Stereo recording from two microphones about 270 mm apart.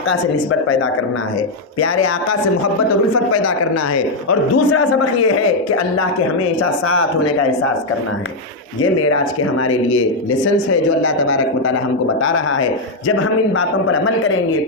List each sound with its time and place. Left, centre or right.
3.9 s a man's voice: left
9.0 s a man's voice: left